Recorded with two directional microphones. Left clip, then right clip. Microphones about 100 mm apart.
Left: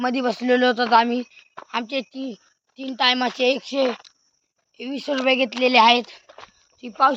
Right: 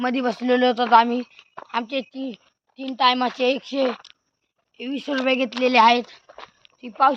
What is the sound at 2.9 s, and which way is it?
Speech, 60° left (ahead or behind).